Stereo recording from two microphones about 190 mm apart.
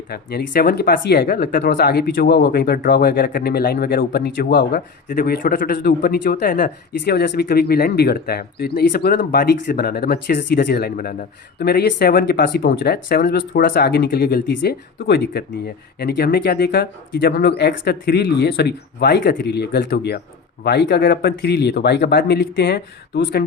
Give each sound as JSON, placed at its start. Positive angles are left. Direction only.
{"t": 0.1, "sound": "speech", "side_deg": 55}